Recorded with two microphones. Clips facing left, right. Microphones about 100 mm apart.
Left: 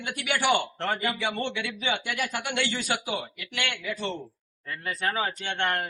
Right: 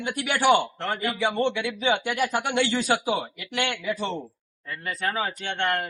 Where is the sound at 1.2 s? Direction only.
30° right (ahead or behind).